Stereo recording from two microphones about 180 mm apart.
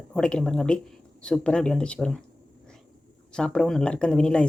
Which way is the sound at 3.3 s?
5° left (ahead or behind).